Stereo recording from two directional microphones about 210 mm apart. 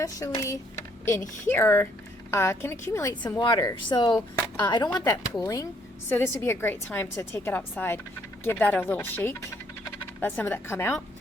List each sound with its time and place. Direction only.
0.0 s a woman's voice: 15° left (ahead or behind)